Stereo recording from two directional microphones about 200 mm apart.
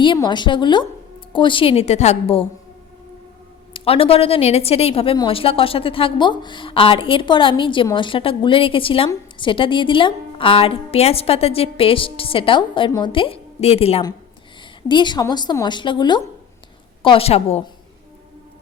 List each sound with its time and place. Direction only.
0.0 s a woman's voice: 25° left (ahead or behind)
3.7 s a woman's voice: 25° left (ahead or behind)